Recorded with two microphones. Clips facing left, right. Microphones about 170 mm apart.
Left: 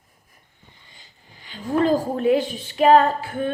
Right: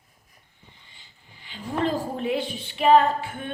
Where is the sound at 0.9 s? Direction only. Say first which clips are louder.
Left 3 dB; 40° left (ahead or behind).